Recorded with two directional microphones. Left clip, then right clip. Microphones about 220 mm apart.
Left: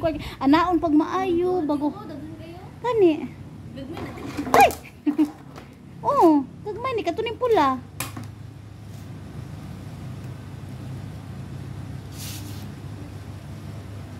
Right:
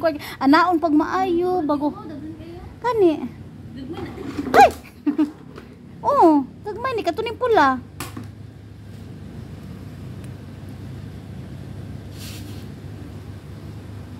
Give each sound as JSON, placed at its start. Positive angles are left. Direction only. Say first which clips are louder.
{"t": 0.0, "sound": "a woman's voice", "louder": "right 3 dB", "side_deg": -25}
{"t": 2.8, "sound": "a woman's voice", "louder": "right 1 dB", "side_deg": -25}
{"t": 4.6, "sound": "a sound", "louder": "right 4 dB", "side_deg": -20}
{"t": 6.0, "sound": "a woman's voice", "louder": "right 3 dB", "side_deg": -20}